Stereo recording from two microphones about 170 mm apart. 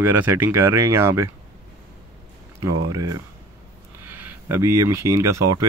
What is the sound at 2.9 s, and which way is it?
Speech, 20° right (ahead or behind).